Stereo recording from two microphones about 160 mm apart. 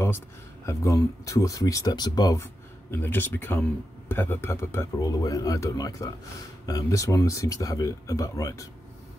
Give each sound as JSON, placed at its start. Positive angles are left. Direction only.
{"t": 0.7, "sound": "speech", "side_deg": 20}